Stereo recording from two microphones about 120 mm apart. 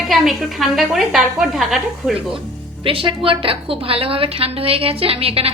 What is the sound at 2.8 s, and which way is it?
A woman's voice, 50° right (ahead or behind).